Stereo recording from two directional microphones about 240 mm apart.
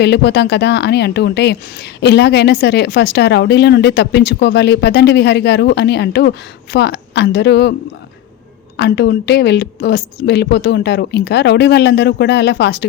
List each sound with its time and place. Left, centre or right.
0.0 s speech: left
8.8 s speech: left